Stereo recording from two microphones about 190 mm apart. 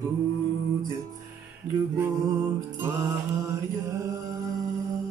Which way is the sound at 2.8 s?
15° right (ahead or behind).